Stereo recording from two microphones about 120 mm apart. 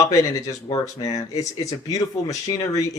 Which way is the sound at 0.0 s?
25° left (ahead or behind).